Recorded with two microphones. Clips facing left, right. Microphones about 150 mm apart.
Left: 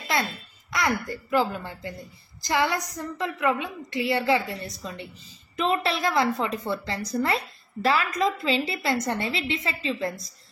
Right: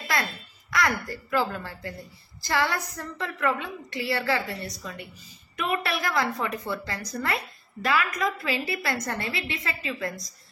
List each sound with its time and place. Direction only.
0.7 s a woman's voice: 20° left (ahead or behind)